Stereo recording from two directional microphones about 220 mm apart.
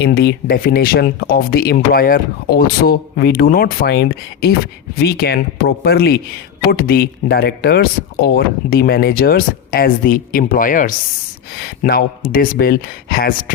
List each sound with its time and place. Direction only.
0.0 s speech: 50° left (ahead or behind)